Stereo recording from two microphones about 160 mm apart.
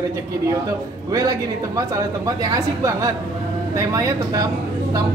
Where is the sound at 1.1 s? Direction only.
20° right (ahead or behind).